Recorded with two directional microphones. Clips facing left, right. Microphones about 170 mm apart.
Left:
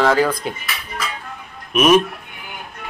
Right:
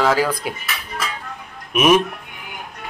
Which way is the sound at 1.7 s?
10° right (ahead or behind).